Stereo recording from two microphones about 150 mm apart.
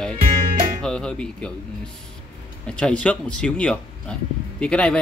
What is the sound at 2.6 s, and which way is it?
Speech, 5° left (ahead or behind).